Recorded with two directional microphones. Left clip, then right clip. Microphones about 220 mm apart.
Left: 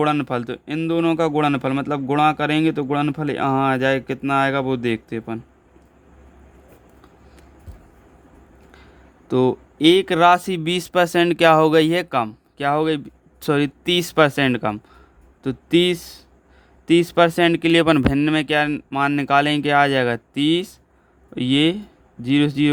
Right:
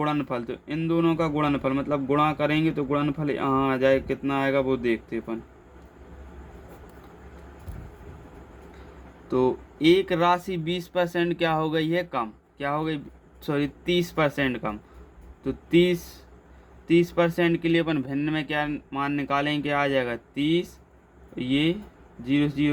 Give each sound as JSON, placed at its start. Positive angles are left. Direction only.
{"t": 0.0, "sound": "speech", "side_deg": 50}
{"t": 9.3, "sound": "speech", "side_deg": 50}